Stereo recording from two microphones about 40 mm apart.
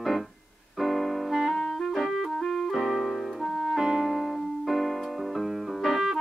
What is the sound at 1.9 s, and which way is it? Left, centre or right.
Music, centre.